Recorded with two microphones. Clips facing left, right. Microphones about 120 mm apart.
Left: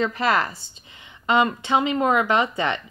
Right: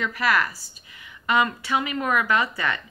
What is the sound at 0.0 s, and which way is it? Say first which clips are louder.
A woman's voice: left 2 dB; 25° left (ahead or behind).